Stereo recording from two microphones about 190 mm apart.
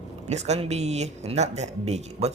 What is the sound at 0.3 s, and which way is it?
Speech, 35° right (ahead or behind).